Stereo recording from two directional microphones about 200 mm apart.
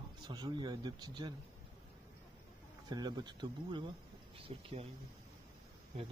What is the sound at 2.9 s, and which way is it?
Speech, 20° right (ahead or behind).